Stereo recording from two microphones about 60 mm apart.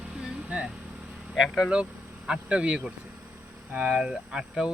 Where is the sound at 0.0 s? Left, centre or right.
Centre.